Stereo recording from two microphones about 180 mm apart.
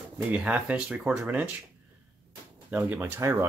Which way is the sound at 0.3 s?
10° right (ahead or behind).